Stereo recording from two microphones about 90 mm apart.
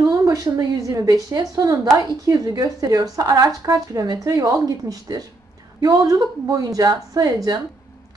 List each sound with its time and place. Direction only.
0.0 s a woman's voice: 40° right (ahead or behind)